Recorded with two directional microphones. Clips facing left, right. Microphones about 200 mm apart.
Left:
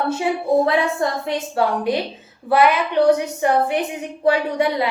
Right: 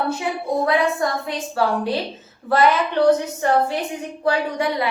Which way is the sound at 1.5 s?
15° left (ahead or behind).